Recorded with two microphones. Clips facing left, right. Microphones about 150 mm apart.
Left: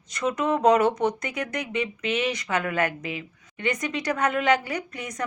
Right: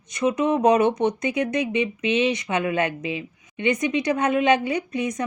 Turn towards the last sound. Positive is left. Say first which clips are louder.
# right 7 dB
turn(degrees=-20)  # may be behind; listen again after turning